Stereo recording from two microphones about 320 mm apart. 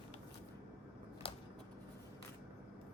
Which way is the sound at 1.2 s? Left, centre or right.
Centre.